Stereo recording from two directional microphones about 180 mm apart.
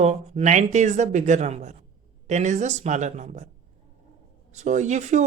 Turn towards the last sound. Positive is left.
turn(degrees=-40)  # may be behind; listen again after turning